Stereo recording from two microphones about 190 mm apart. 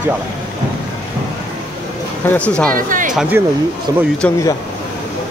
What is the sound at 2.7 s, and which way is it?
Speech, 45° right (ahead or behind).